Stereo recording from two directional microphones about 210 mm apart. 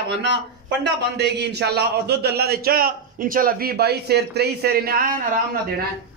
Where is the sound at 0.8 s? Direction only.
55° right (ahead or behind).